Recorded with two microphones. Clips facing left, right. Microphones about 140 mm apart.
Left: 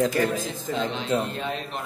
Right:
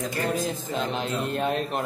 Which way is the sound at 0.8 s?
45° right (ahead or behind).